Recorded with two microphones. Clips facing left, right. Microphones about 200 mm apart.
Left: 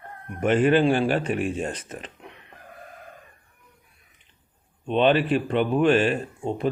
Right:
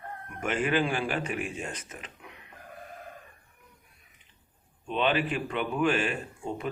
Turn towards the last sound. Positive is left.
turn(degrees=35)  # may be behind; listen again after turning